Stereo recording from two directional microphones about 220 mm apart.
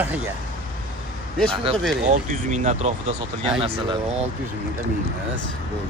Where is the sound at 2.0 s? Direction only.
30° right (ahead or behind).